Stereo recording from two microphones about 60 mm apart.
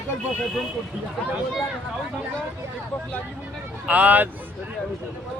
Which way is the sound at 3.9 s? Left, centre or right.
Right.